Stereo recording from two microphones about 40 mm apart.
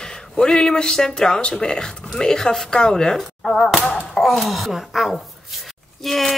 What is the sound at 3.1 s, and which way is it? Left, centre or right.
Speech, centre.